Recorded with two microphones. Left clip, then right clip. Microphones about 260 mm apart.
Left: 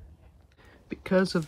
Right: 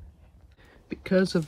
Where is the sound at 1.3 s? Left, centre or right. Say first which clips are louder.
Right 2 dB; centre.